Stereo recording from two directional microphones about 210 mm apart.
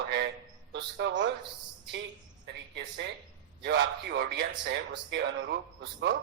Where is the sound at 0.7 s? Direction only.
55° right (ahead or behind).